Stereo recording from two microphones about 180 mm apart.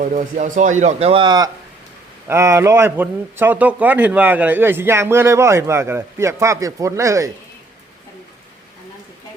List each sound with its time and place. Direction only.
0.0 s a man's voice: 45° right (ahead or behind); by 7.3 s 15° right (ahead or behind)